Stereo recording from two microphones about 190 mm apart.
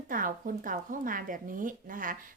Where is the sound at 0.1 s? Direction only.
45° right (ahead or behind).